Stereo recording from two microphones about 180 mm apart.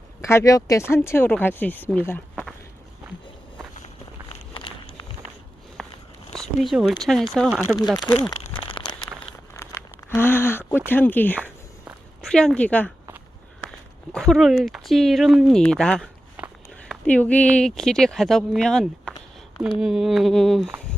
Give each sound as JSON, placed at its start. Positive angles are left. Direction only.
{"t": 0.2, "sound": "speech", "side_deg": 15}
{"t": 3.8, "sound": "walk", "side_deg": 35}
{"t": 5.8, "sound": "walk", "side_deg": 0}
{"t": 6.3, "sound": "speech", "side_deg": 0}
{"t": 7.8, "sound": "speech", "side_deg": 25}
{"t": 9.6, "sound": "a sound", "side_deg": 15}
{"t": 12.2, "sound": "speech", "side_deg": 5}
{"t": 14.1, "sound": "speech", "side_deg": 0}